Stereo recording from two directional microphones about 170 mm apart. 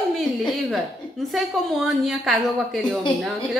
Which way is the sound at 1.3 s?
Centre (ahead or behind).